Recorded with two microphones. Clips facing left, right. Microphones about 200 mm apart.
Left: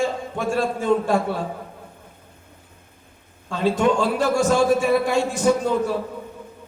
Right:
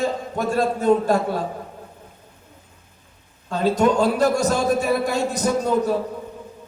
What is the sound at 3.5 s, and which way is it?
A man's voice, 40° right (ahead or behind).